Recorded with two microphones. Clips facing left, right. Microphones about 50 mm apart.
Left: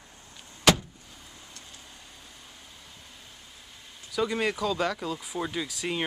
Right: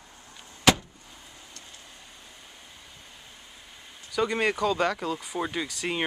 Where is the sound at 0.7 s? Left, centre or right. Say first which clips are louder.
Right 1 dB; centre.